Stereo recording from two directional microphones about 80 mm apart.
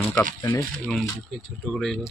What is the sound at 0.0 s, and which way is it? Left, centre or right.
Speech, left.